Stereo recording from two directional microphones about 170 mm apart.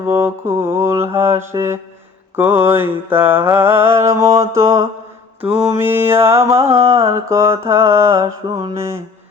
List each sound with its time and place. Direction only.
0.1 s mantra: 15° right (ahead or behind)
5.5 s mantra: 35° right (ahead or behind)
5.8 s mantra: 15° right (ahead or behind)